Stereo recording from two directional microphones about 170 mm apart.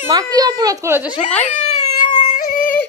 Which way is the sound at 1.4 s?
40° left (ahead or behind).